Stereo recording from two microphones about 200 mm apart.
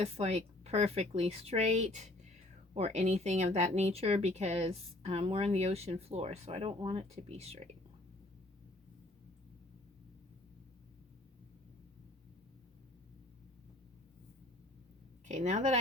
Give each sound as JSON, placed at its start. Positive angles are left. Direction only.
{"t": 0.0, "sound": "speech", "side_deg": -35}
{"t": 15.3, "sound": "speech", "side_deg": -35}